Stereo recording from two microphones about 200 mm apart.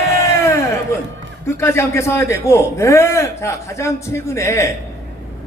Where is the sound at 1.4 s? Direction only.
15° left (ahead or behind).